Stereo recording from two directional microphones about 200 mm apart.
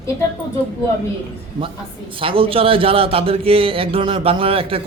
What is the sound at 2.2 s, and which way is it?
A man's voice, 25° right (ahead or behind).